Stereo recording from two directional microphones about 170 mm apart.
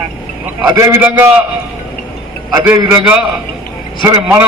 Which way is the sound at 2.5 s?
10° right (ahead or behind).